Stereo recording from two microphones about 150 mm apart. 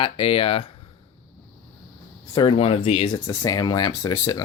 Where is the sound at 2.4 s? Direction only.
35° left (ahead or behind).